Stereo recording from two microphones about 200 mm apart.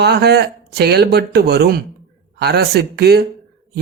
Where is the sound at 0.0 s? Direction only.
55° right (ahead or behind).